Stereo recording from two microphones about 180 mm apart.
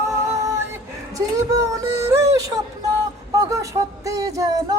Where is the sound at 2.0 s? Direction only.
15° right (ahead or behind).